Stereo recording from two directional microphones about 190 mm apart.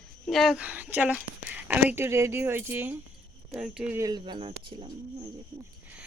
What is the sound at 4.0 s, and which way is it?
Speech, 25° right (ahead or behind).